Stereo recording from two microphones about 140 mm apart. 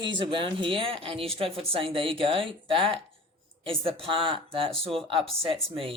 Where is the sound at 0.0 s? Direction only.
35° right (ahead or behind).